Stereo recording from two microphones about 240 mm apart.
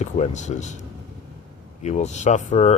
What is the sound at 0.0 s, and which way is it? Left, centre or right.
Speech, left.